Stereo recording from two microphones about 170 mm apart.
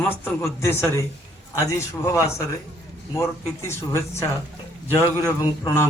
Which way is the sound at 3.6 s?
15° left (ahead or behind).